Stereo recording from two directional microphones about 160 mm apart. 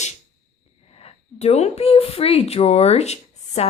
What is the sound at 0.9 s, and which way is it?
Speech, 40° left (ahead or behind).